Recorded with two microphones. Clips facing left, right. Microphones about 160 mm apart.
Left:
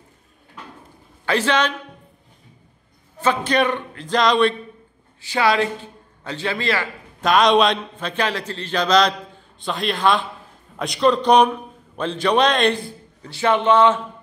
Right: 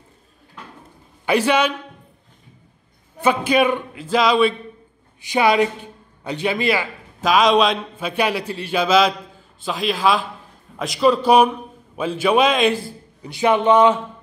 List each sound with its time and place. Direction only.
1.2 s a man's voice: 10° right (ahead or behind)
3.2 s a man's voice: 10° right (ahead or behind)
5.2 s a man's voice: 15° right (ahead or behind)
7.2 s a man's voice: centre (ahead or behind)